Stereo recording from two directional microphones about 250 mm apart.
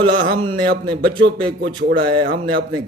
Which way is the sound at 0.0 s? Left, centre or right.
Right.